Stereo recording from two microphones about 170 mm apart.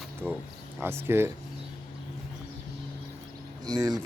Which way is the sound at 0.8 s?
15° right (ahead or behind).